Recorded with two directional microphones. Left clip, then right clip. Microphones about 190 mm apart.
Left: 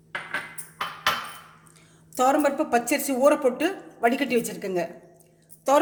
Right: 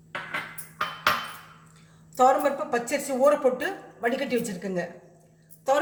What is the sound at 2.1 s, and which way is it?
A woman's voice, 55° left (ahead or behind).